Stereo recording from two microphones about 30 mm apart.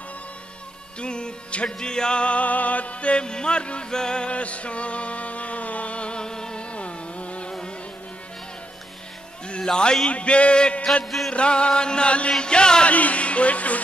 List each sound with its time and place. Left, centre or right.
0.9 s music: left
1.8 s music: left
2.2 s music: left
3.3 s music: left
4.3 s music: left
9.6 s a man's voice: left
10.0 s music: left
12.8 s speech: left